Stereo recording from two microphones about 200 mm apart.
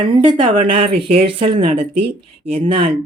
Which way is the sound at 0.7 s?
25° right (ahead or behind).